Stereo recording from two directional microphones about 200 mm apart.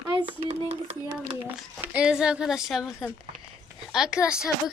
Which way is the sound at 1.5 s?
5° right (ahead or behind).